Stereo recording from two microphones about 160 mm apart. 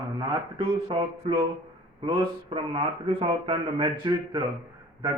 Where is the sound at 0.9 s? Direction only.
35° right (ahead or behind).